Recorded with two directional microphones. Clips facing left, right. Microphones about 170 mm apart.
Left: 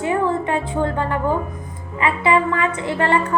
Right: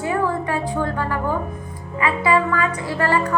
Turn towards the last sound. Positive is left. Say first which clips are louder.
# left 1 dB
turn(degrees=25)  # may be behind; listen again after turning